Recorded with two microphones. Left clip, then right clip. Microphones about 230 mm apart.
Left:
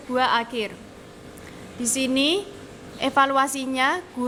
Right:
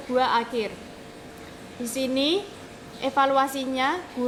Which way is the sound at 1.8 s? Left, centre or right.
Left.